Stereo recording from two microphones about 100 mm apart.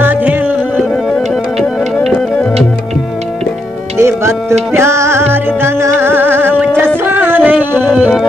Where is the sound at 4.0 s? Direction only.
25° right (ahead or behind).